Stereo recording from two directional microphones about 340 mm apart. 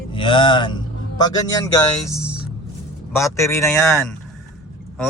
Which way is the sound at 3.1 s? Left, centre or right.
Centre.